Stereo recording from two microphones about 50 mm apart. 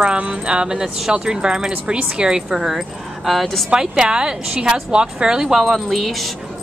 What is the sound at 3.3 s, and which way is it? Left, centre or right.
Speech, centre.